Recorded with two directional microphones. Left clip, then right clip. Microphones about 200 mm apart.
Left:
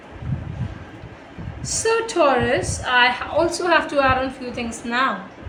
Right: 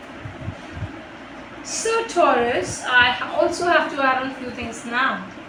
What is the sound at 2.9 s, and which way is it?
A woman's voice, 65° left (ahead or behind).